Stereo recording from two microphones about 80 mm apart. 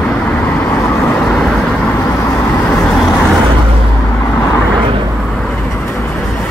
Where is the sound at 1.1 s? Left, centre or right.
Centre.